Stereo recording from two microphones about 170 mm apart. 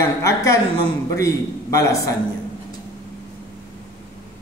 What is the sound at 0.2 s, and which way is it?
A man's voice, 20° left (ahead or behind).